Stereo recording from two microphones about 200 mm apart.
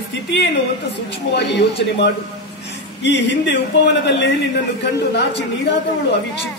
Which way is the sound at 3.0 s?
60° left (ahead or behind).